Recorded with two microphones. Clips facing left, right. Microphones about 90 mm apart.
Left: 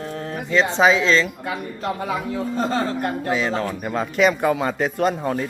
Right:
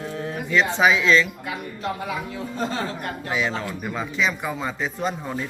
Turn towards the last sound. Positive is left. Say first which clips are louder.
# left 6 dB
turn(degrees=60)  # may be behind; listen again after turning